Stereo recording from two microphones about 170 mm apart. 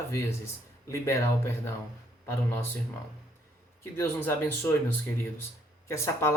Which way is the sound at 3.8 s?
15° left (ahead or behind).